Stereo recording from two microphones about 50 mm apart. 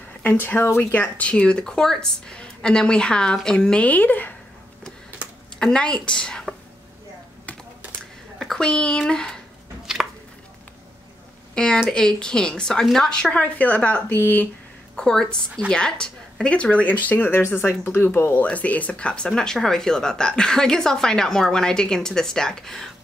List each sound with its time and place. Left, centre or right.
0.2 s a woman's voice: left
1.0 s speech: left
3.8 s a woman's voice: left
5.2 s computer keyboard: right
5.6 s speech: centre
8.4 s speech: centre
9.9 s chopping: centre
11.5 s speech: centre
13.4 s a woman's voice: left
14.1 s speech: left
15.0 s speech: centre; by 17.3 s left
17.6 s speech: left
18.0 s speech: left
18.4 s speech: left; by 22.8 s centre